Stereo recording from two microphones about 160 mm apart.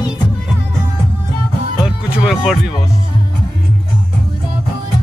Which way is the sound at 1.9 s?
5° right (ahead or behind).